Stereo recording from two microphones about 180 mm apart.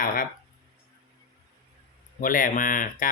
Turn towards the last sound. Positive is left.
turn(degrees=50)  # may be behind; listen again after turning